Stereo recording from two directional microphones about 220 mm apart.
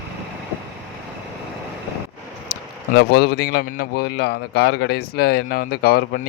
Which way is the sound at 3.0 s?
45° left (ahead or behind).